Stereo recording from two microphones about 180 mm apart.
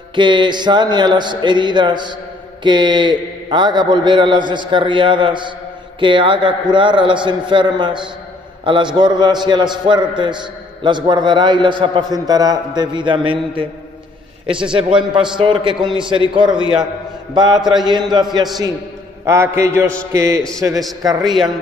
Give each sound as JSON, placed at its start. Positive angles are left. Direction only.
{"t": 0.1, "sound": "a man's voice", "side_deg": -25}